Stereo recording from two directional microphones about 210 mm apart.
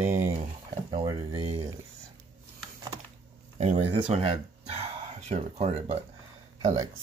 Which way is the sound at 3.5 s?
30° right (ahead or behind).